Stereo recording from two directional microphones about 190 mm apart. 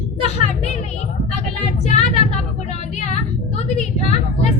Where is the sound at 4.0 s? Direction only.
35° left (ahead or behind).